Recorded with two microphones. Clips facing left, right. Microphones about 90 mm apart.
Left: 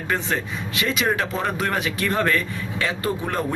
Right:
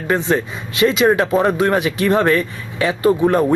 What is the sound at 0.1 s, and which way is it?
A man's voice, 20° right (ahead or behind).